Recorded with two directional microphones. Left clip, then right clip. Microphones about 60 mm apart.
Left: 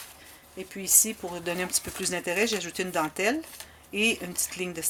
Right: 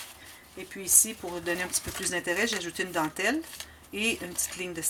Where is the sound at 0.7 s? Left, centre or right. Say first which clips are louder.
Left 1 dB; left.